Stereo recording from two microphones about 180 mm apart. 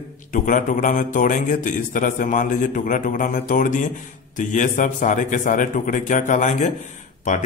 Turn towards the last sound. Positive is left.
turn(degrees=40)  # may be behind; listen again after turning